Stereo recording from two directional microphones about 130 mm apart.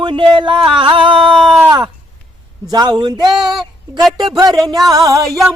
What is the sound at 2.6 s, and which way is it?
Music, 30° right (ahead or behind).